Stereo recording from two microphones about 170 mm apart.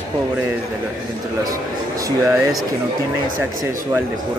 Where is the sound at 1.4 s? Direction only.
20° right (ahead or behind).